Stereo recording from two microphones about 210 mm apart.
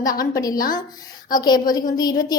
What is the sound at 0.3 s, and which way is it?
A woman's voice, 15° left (ahead or behind).